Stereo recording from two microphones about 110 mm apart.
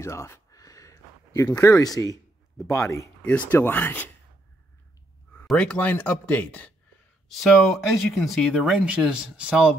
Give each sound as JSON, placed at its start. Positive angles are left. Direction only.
{"t": 0.0, "sound": "a sound", "side_deg": 25}
{"t": 2.7, "sound": "speech", "side_deg": 25}
{"t": 3.2, "sound": "speech", "side_deg": 15}
{"t": 5.5, "sound": "speech", "side_deg": 10}
{"t": 7.2, "sound": "speech", "side_deg": 0}